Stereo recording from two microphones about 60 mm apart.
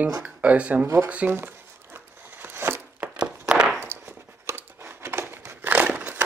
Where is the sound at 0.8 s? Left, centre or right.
Right.